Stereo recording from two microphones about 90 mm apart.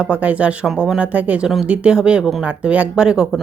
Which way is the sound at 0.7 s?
5° right (ahead or behind).